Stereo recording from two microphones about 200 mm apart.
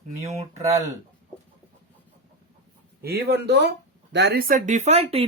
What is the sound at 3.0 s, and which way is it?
Speech, 55° right (ahead or behind).